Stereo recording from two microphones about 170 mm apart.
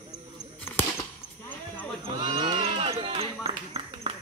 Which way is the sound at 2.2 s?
25° right (ahead or behind).